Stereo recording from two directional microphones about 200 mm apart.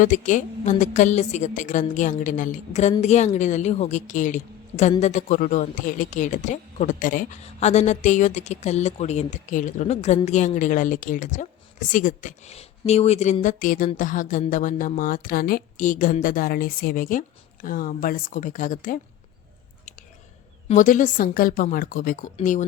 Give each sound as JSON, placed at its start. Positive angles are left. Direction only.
{"t": 0.0, "sound": "a woman's voice", "side_deg": 40}
{"t": 20.7, "sound": "a woman's voice", "side_deg": 40}